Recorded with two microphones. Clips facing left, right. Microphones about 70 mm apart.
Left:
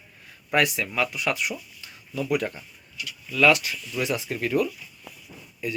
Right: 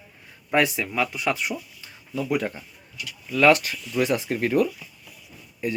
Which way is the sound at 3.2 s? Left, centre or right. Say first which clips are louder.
Right 2 dB; right.